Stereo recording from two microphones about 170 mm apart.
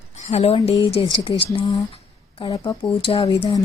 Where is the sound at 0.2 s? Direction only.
40° left (ahead or behind).